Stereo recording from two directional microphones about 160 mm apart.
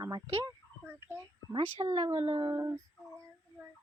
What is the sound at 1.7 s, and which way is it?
Speech, 40° right (ahead or behind).